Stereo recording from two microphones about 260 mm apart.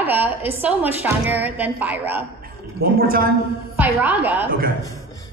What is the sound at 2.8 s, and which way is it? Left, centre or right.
Speech, right.